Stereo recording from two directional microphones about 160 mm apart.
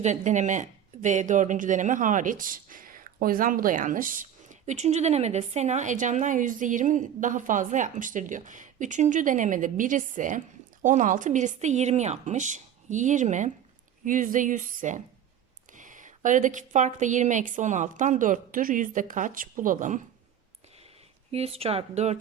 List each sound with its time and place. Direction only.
0.0 s speech: 50° right (ahead or behind)
21.3 s speech: 40° right (ahead or behind)